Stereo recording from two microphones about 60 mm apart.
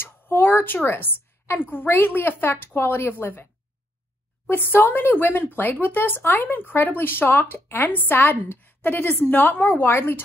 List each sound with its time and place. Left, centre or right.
0.0 s a sound: left
0.8 s speech: left
4.5 s speech: left